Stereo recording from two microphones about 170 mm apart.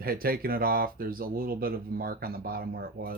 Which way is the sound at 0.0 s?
60° right (ahead or behind).